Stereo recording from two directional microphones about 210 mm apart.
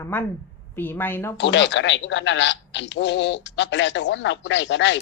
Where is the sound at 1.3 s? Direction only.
60° left (ahead or behind).